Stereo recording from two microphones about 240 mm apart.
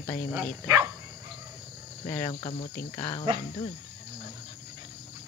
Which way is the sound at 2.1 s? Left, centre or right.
Centre.